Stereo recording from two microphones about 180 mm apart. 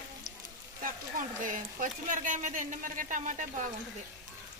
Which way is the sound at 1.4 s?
45° right (ahead or behind).